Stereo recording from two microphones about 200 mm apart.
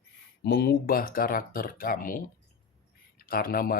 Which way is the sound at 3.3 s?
45° left (ahead or behind).